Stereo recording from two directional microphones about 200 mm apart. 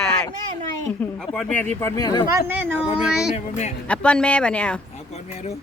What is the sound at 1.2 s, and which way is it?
Speech, 5° left (ahead or behind).